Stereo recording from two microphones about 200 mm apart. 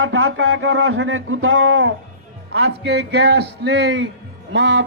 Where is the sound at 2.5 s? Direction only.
60° right (ahead or behind).